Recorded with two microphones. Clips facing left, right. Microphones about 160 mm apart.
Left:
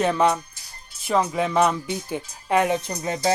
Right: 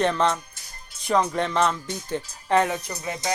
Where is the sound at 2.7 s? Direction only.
30° left (ahead or behind).